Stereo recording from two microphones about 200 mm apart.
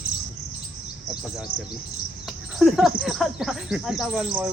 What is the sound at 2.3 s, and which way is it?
Speech, centre (ahead or behind).